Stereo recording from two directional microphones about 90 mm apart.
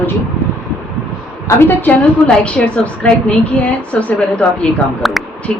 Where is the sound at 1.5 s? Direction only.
20° left (ahead or behind).